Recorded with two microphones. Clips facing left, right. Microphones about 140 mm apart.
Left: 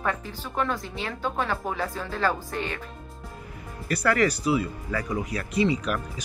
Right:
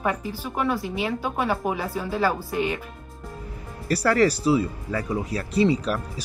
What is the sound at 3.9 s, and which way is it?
Speech, 35° right (ahead or behind).